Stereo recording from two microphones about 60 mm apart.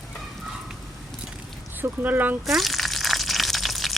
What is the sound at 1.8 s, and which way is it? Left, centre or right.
Speech, right.